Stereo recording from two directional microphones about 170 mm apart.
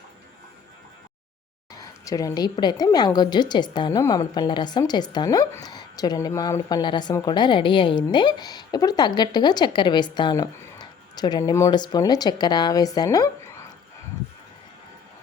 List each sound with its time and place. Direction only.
1.7 s speech: 20° left (ahead or behind)